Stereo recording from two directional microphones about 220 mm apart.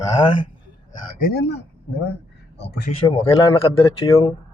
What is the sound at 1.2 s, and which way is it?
Speech, 50° left (ahead or behind).